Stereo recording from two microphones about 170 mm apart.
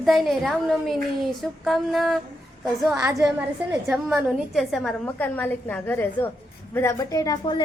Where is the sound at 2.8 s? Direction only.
15° right (ahead or behind).